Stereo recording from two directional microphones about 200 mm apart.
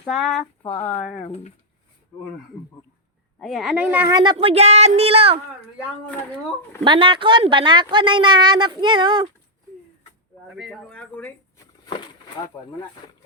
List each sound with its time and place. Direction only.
0.0 s speech: centre (ahead or behind)
0.8 s speech: 10° left (ahead or behind)
1.1 s speech: 35° left (ahead or behind)
3.4 s speech: centre (ahead or behind)
4.1 s a woman's voice: 20° right (ahead or behind)
6.8 s a woman's voice: 25° right (ahead or behind)
10.5 s speech: centre (ahead or behind)